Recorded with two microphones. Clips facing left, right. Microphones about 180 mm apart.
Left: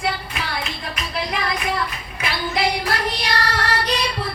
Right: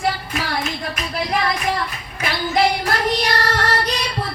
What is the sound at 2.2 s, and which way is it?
Child singing, 45° right (ahead or behind).